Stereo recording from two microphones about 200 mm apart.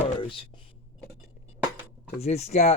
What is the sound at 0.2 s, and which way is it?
Whispering, 25° left (ahead or behind).